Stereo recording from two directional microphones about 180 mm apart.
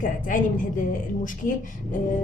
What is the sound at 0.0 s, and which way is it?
A woman's voice, 45° left (ahead or behind).